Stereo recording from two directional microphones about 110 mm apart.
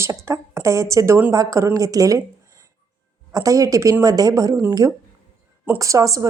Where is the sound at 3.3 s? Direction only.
30° right (ahead or behind).